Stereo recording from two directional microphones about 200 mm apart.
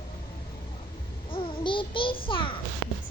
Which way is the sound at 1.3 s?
25° left (ahead or behind).